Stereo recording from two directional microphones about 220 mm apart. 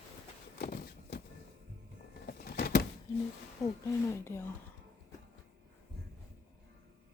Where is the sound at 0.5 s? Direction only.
45° left (ahead or behind).